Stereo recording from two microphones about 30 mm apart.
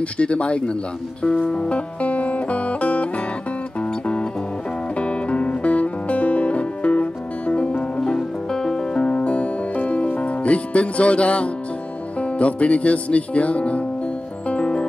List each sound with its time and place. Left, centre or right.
0.2 s speech: left
2.0 s music: left
4.9 s music: left
8.0 s music: centre
9.2 s music: left